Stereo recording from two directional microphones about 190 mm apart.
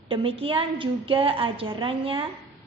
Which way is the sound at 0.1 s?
30° right (ahead or behind).